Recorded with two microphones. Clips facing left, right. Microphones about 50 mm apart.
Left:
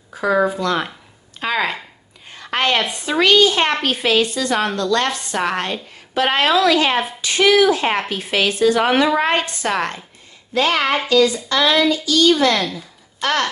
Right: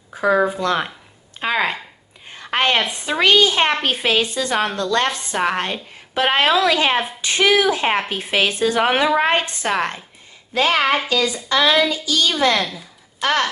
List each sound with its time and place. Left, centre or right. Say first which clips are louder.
0.6 s a woman's voice: even; right
1.4 s a woman's voice: even; centre
2.2 s a sound: even; right
2.9 s a woman's voice: left 1 dB; right